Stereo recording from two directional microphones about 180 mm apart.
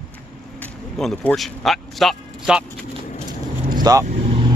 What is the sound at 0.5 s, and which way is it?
Speech, 5° left (ahead or behind).